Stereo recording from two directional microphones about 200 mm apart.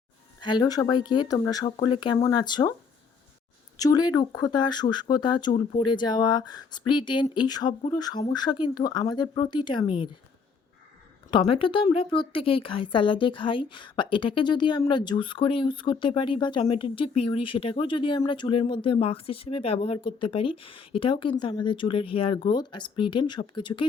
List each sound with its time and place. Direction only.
0.4 s speech: 20° left (ahead or behind)
3.8 s speech: 20° left (ahead or behind)
11.3 s speech: 25° left (ahead or behind)